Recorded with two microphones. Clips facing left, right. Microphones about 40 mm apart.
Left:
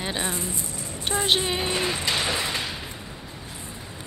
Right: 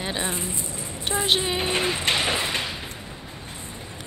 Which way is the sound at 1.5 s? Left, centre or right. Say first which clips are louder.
Right 2 dB; right.